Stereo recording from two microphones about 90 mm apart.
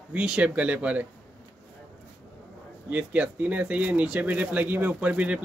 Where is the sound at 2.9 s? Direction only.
15° right (ahead or behind).